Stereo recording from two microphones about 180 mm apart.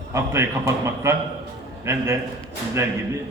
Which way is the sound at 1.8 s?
15° right (ahead or behind).